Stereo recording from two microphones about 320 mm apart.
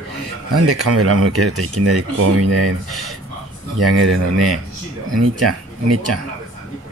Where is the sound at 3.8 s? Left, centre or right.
Right.